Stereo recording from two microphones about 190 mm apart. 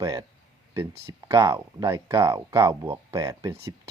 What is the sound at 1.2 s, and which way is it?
Speech, 15° right (ahead or behind).